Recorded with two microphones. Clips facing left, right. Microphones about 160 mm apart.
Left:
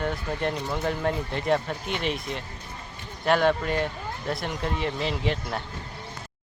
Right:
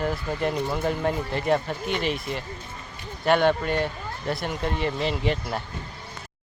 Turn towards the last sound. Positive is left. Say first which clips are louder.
# right 2 dB
turn(degrees=0)  # may be behind; listen again after turning